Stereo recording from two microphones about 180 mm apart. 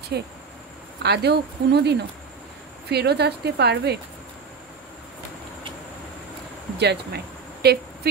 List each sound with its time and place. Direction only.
0.1 s a woman's voice: 65° right (ahead or behind)
6.8 s speech: 65° right (ahead or behind)
7.6 s a sound: 65° right (ahead or behind)